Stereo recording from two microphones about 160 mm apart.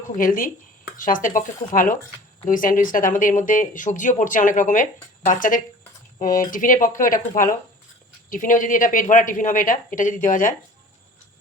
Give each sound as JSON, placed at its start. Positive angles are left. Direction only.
{"t": 0.2, "sound": "speech", "side_deg": 60}